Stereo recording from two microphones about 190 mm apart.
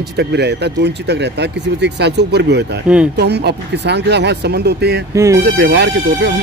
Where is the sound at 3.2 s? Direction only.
60° right (ahead or behind).